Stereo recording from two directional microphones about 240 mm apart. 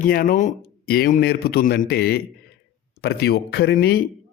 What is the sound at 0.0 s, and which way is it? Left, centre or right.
Speech, left.